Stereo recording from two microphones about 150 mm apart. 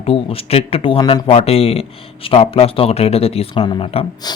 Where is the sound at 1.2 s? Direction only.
40° left (ahead or behind).